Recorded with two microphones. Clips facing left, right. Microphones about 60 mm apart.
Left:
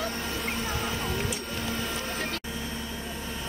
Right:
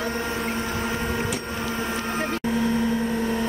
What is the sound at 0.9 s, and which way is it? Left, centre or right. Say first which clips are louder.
Printer: right 5 dB; right.